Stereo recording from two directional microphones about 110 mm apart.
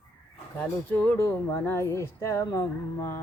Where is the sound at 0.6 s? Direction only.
15° left (ahead or behind).